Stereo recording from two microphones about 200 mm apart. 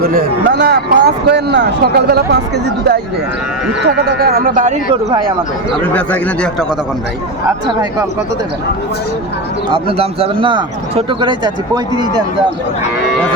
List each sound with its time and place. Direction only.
0.0 s speech: 50° right (ahead or behind)
3.8 s speech: 50° right (ahead or behind)
5.8 s speech: 5° left (ahead or behind)
9.6 s speech: 25° right (ahead or behind)